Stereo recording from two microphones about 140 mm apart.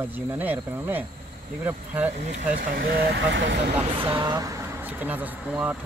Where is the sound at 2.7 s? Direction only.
90° right.